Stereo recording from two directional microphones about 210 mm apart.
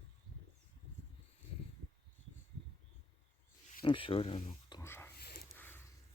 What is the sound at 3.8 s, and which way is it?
Speech, 25° left (ahead or behind).